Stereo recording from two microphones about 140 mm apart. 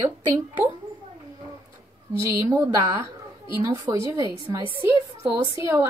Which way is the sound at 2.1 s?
20° right (ahead or behind).